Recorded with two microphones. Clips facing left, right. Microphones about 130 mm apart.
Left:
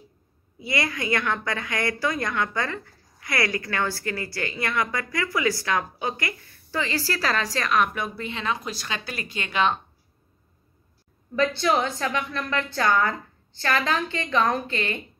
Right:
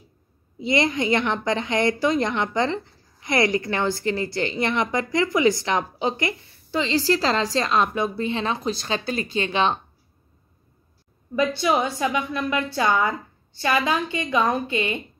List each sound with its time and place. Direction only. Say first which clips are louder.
0.6 s a woman's voice: right 6 dB; 20° right (ahead or behind)
11.3 s a woman's voice: right 1 dB; 10° right (ahead or behind)